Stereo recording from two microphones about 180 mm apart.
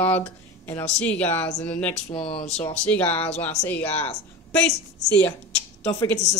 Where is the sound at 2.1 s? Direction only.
35° left (ahead or behind).